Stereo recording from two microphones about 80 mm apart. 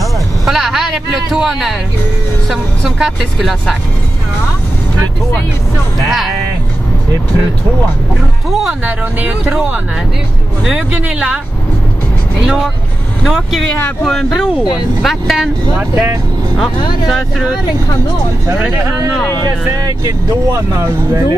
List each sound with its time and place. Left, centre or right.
0.0 s a sound: centre
1.3 s speech: centre
6.0 s speech: centre
8.5 s speech: centre
8.8 s speech: centre
10.9 s speech: centre
13.2 s speech: centre
14.0 s speech: centre
15.9 s speech: right
16.5 s speech: centre
19.4 s speech: right